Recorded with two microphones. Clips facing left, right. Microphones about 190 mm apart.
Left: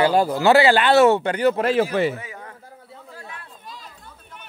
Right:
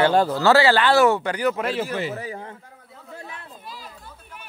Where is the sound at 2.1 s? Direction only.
35° right (ahead or behind).